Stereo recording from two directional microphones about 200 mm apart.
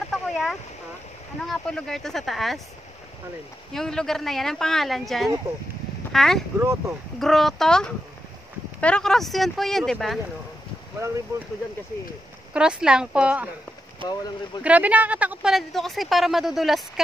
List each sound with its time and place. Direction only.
0.1 s fowl: centre (ahead or behind)
1.4 s speech: centre (ahead or behind)
3.7 s speech: centre (ahead or behind)
6.6 s speech: 15° right (ahead or behind)
7.2 s speech: centre (ahead or behind)
12.5 s speech: 5° right (ahead or behind)
14.0 s speech: 20° left (ahead or behind)
14.6 s speech: 5° right (ahead or behind)